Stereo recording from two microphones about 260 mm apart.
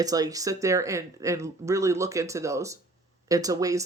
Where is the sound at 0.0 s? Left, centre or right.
Centre.